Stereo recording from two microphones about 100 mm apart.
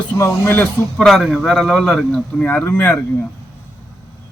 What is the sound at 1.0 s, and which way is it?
A man's voice, 5° left (ahead or behind).